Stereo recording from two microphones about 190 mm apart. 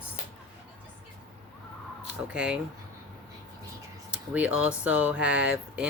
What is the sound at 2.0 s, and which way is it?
Speech, 5° right (ahead or behind).